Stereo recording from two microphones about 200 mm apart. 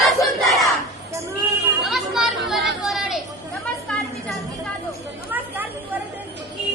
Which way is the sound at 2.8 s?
Centre (ahead or behind).